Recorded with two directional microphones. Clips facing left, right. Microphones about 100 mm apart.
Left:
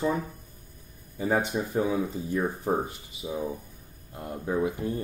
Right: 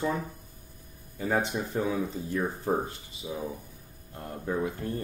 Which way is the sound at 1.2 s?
15° left (ahead or behind).